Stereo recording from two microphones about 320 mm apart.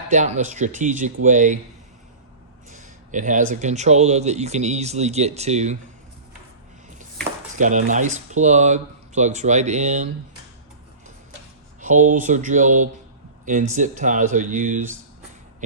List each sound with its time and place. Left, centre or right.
0.1 s speech: right
2.6 s a sound: right
3.5 s speech: right
7.6 s speech: right
11.8 s speech: right